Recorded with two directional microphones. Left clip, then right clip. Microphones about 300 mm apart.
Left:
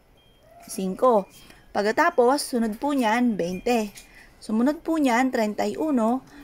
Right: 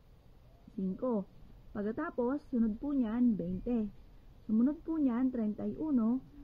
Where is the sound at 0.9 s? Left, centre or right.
Centre.